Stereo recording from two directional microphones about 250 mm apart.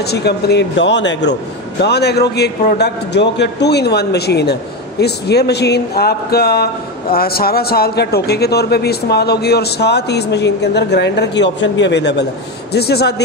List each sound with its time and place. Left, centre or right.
0.0 s a man's voice: left